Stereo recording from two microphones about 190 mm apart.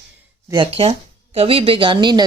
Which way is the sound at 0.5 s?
30° right (ahead or behind).